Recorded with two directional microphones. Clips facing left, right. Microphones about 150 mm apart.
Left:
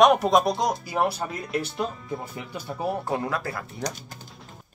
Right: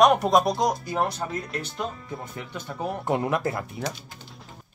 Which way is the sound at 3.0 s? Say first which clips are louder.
Right 3 dB; 20° right (ahead or behind).